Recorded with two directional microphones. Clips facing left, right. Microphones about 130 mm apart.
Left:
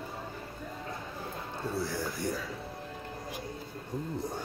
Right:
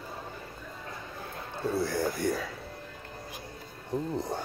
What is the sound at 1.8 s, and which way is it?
Speech, 60° right (ahead or behind).